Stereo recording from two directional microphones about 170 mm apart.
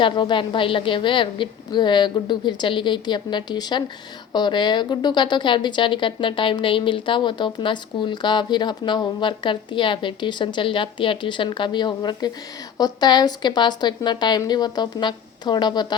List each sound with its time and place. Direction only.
0.0 s a woman's voice: 30° left (ahead or behind)